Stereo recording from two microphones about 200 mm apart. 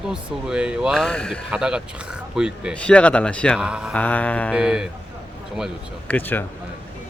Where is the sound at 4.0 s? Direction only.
5° left (ahead or behind).